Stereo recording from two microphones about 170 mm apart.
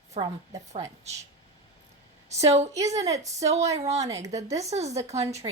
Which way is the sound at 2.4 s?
40° right (ahead or behind).